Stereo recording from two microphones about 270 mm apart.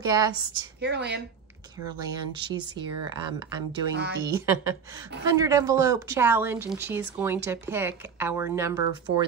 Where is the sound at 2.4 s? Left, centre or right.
Centre.